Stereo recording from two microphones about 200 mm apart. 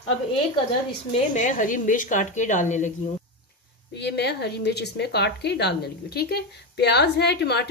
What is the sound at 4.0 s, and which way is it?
A woman's voice, 55° left (ahead or behind).